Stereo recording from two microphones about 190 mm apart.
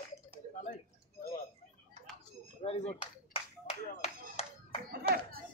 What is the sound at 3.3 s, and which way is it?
Clapping, 30° left (ahead or behind).